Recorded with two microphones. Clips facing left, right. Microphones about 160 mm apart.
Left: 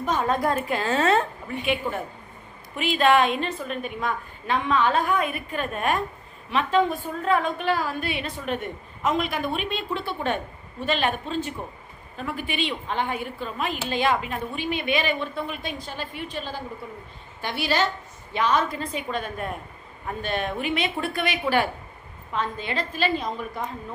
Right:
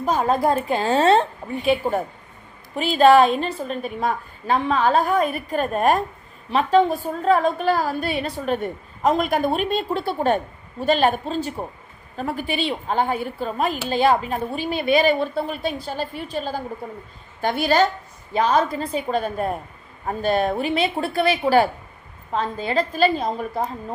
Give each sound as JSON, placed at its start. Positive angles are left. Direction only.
{"t": 0.0, "sound": "a woman's voice", "side_deg": -35}
{"t": 18.3, "sound": "a woman's voice", "side_deg": -35}